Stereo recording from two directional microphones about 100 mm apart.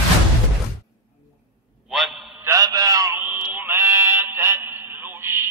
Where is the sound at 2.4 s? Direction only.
35° right (ahead or behind).